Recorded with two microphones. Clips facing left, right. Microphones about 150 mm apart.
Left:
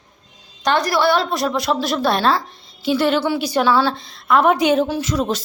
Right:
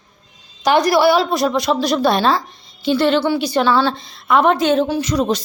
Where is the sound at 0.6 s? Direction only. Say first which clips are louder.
Right 4 dB; 15° right (ahead or behind).